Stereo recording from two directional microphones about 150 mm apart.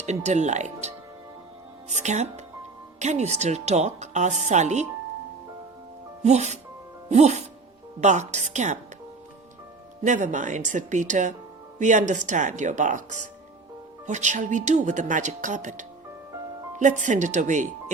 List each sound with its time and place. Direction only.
0.0 s speech: 50° right (ahead or behind)
6.2 s speech: 50° right (ahead or behind)
10.0 s speech: 55° right (ahead or behind)